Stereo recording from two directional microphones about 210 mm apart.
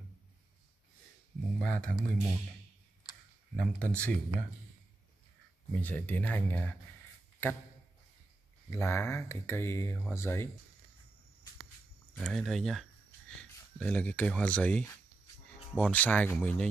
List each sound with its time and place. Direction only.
1.6 s speech: 5° left (ahead or behind)
3.5 s speech: 5° left (ahead or behind)
5.8 s speech: 10° left (ahead or behind)
8.6 s speech: 10° left (ahead or behind)
12.2 s speech: centre (ahead or behind)